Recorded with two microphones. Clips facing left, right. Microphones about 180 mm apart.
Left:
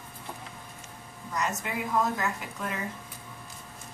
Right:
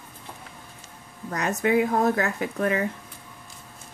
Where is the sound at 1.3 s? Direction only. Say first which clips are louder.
Right 9 dB; 65° right (ahead or behind).